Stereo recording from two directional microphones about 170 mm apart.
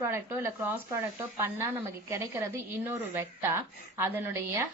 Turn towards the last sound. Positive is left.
turn(degrees=-15)  # may be behind; listen again after turning